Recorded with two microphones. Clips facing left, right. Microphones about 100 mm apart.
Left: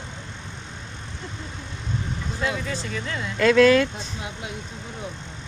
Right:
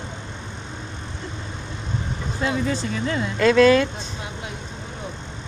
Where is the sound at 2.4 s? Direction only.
30° right (ahead or behind).